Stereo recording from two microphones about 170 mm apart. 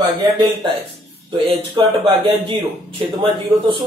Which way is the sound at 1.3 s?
30° right (ahead or behind).